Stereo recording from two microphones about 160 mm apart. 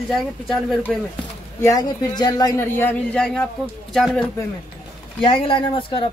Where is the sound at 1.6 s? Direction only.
25° left (ahead or behind).